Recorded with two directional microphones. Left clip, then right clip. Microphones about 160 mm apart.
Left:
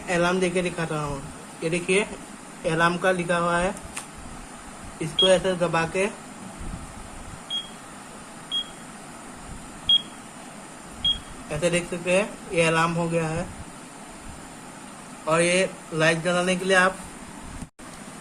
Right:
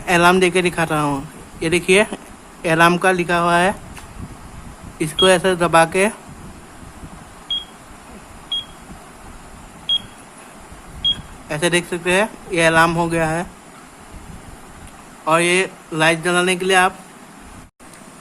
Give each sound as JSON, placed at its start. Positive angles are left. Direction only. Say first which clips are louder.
{"t": 0.1, "sound": "speech", "louder": "right 10 dB", "side_deg": -70}
{"t": 1.6, "sound": "speech", "louder": "right 9 dB", "side_deg": -70}
{"t": 4.9, "sound": "speech", "louder": "right 5 dB", "side_deg": -70}
{"t": 11.4, "sound": "speech", "louder": "right 6 dB", "side_deg": -65}
{"t": 15.3, "sound": "speech", "louder": "right 5 dB", "side_deg": -65}